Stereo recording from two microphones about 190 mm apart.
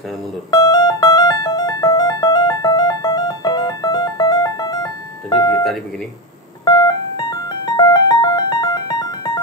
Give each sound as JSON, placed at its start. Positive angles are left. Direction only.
{"t": 0.5, "sound": "music", "side_deg": 20}
{"t": 5.5, "sound": "cash register", "side_deg": 0}
{"t": 6.6, "sound": "music", "side_deg": 20}